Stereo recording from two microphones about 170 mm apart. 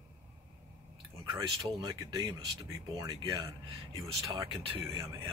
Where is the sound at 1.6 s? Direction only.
20° right (ahead or behind).